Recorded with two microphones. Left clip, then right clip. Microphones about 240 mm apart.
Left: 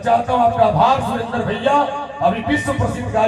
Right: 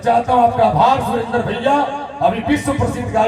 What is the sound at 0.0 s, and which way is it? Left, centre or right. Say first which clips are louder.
A man's voice: right 2 dB; right.